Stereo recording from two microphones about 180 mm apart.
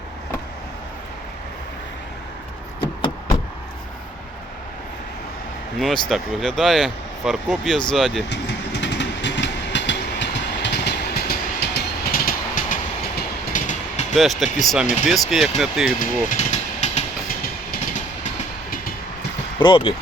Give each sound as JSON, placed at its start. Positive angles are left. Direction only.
{"t": 2.8, "sound": "a sound", "side_deg": 25}
{"t": 6.1, "sound": "speech", "side_deg": 0}
{"t": 8.3, "sound": "vehicle", "side_deg": 75}
{"t": 13.5, "sound": "train", "side_deg": 45}
{"t": 14.2, "sound": "speech", "side_deg": 0}
{"t": 16.0, "sound": "engine", "side_deg": 40}
{"t": 19.5, "sound": "speech", "side_deg": 25}